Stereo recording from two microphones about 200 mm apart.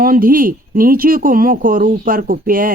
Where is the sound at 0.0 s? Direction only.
45° right (ahead or behind).